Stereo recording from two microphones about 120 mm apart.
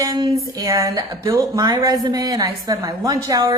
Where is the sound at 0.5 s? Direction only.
25° right (ahead or behind).